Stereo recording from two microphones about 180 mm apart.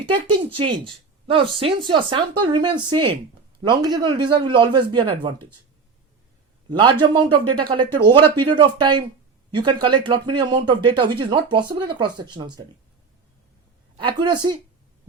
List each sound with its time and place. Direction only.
0.1 s speech: 30° right (ahead or behind)
6.7 s speech: 25° right (ahead or behind)
14.2 s speech: 25° right (ahead or behind)